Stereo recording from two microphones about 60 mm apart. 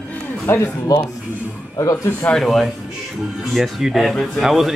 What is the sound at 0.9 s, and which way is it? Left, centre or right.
Speech, left.